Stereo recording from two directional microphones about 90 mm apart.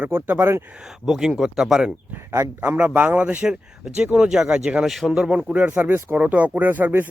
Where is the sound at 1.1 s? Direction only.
5° right (ahead or behind).